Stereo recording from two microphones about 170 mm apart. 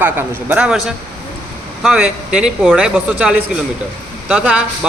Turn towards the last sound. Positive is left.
turn(degrees=-10)  # may be behind; listen again after turning